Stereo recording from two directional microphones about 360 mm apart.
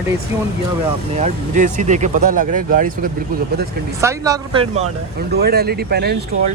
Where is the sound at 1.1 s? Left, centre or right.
Centre.